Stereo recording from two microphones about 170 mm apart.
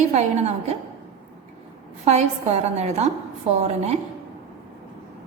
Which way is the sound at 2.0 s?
40° right (ahead or behind).